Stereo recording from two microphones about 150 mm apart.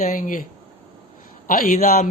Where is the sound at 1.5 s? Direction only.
65° left (ahead or behind).